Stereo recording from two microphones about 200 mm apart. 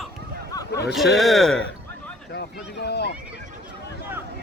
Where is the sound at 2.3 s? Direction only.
55° left (ahead or behind).